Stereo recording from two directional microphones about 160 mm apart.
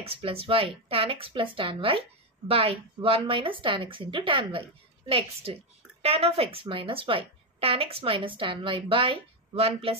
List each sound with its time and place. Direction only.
0.0 s a woman's voice: 35° right (ahead or behind)